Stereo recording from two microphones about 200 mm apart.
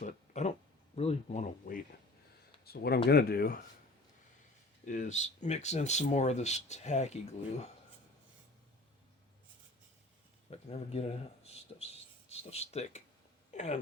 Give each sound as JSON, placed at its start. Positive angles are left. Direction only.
{"t": 0.0, "sound": "speech", "side_deg": 35}
{"t": 0.9, "sound": "a sound", "side_deg": 30}
{"t": 2.6, "sound": "speech", "side_deg": 50}
{"t": 4.9, "sound": "speech", "side_deg": 40}
{"t": 10.5, "sound": "speech", "side_deg": 30}